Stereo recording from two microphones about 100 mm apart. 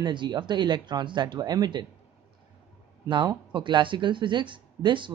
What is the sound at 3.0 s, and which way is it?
Speech, 50° right (ahead or behind).